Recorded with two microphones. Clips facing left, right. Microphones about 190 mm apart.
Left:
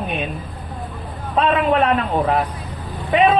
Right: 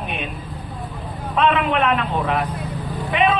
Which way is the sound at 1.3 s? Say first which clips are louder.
Left 2 dB; 30° left (ahead or behind).